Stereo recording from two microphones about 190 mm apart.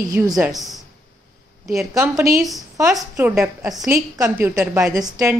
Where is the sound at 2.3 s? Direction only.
Centre (ahead or behind).